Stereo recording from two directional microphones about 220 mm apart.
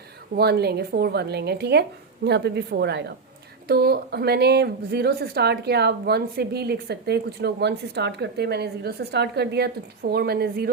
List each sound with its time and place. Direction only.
0.3 s a woman's voice: 45° right (ahead or behind)